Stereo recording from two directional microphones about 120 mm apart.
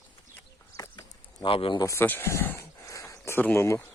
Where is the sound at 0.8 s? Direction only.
40° left (ahead or behind).